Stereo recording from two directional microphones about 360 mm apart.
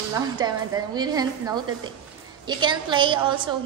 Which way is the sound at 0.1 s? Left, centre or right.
Centre.